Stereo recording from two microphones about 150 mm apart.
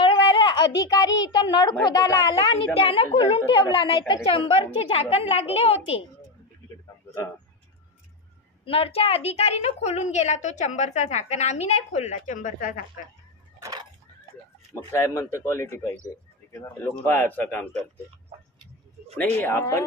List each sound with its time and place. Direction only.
0.0 s a woman's voice: 35° left (ahead or behind)
2.7 s a woman's voice: 40° left (ahead or behind)
8.6 s a woman's voice: 40° left (ahead or behind); by 12.8 s 65° left (ahead or behind)
13.6 s a sound: 25° right (ahead or behind)
14.8 s speech: 20° left (ahead or behind)
19.4 s speech: 20° left (ahead or behind)